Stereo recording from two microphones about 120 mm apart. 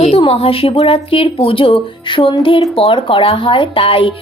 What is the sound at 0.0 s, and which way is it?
Speech, 55° left (ahead or behind).